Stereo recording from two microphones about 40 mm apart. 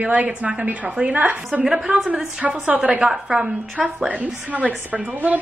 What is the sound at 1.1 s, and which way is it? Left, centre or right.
Speech, right.